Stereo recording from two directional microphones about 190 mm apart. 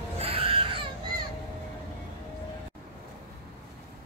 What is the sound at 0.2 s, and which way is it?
Music, 30° right (ahead or behind).